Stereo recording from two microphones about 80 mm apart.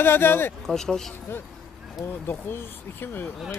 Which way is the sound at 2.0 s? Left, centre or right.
Left.